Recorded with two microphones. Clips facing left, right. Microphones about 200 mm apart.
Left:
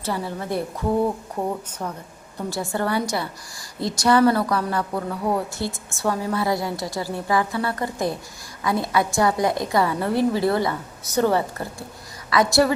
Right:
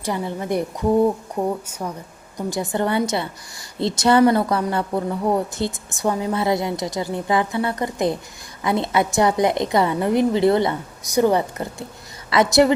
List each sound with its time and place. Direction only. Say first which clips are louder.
0.0 s a woman's voice: right 2 dB; 15° right (ahead or behind)
2.5 s a woman's voice: right 3 dB; 20° right (ahead or behind)